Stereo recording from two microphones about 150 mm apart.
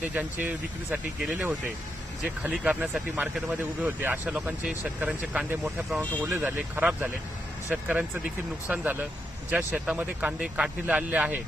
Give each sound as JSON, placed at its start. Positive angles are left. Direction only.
{"t": 0.0, "sound": "speech", "side_deg": -10}